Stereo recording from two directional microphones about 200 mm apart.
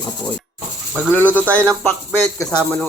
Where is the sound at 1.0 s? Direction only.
10° left (ahead or behind).